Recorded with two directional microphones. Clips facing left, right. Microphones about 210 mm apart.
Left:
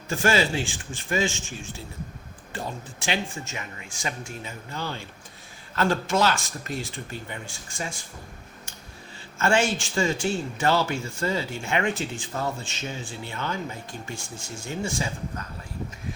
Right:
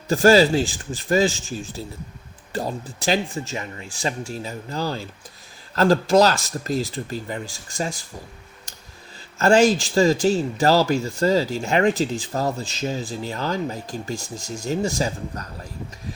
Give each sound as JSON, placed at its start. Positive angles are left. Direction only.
{"t": 0.1, "sound": "speech", "side_deg": -35}
{"t": 8.7, "sound": "a sound", "side_deg": -35}
{"t": 9.4, "sound": "speech", "side_deg": -35}